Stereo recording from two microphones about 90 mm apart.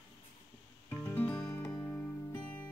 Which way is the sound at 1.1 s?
20° left (ahead or behind).